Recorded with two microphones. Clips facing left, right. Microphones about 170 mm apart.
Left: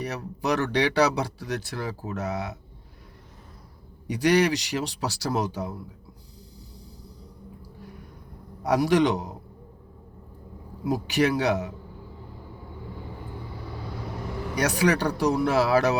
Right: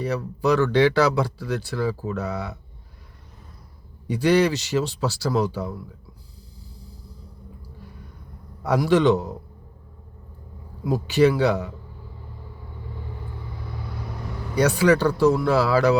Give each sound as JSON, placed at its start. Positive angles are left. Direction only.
{"t": 0.0, "sound": "speech", "side_deg": 15}
{"t": 4.0, "sound": "speech", "side_deg": 15}
{"t": 8.6, "sound": "speech", "side_deg": 15}
{"t": 10.9, "sound": "speech", "side_deg": 15}
{"t": 14.5, "sound": "speech", "side_deg": 15}